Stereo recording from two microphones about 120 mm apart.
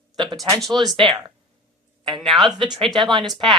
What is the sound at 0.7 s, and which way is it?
Speech, centre (ahead or behind).